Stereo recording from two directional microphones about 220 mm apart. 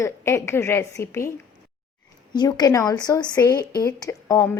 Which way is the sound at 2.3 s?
20° left (ahead or behind).